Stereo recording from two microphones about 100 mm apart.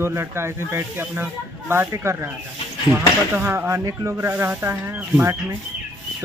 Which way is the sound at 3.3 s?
20° right (ahead or behind).